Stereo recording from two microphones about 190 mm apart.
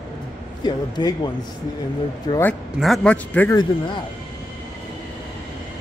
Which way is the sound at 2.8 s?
5° left (ahead or behind).